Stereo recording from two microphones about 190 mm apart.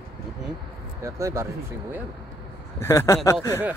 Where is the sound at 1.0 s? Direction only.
15° right (ahead or behind).